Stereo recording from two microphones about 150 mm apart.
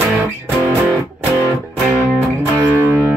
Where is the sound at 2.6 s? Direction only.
15° right (ahead or behind).